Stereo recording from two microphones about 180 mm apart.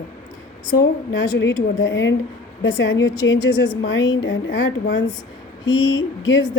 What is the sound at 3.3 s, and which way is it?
Speech, 90° left.